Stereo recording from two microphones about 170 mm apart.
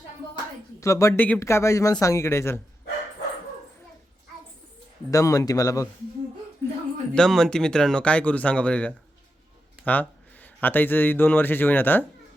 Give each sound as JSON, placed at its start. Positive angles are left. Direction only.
{"t": 0.8, "sound": "speech", "side_deg": 20}
{"t": 5.1, "sound": "a man's voice", "side_deg": 20}